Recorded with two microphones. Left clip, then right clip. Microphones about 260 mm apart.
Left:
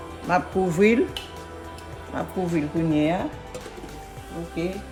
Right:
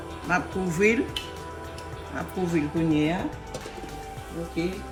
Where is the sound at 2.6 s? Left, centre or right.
Left.